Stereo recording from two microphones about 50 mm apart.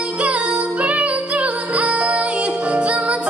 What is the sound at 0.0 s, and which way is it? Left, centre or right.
Music, right.